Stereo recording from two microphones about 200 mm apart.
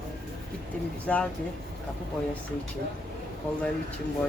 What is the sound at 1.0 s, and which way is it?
Speech, 5° left (ahead or behind).